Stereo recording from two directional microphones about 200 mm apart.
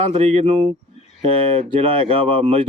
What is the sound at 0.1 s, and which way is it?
Speech, 30° right (ahead or behind).